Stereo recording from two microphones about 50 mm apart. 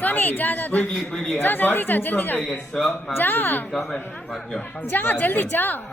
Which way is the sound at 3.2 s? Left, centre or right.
Left.